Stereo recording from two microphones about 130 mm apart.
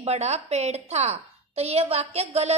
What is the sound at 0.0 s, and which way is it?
A woman's voice, 55° right (ahead or behind).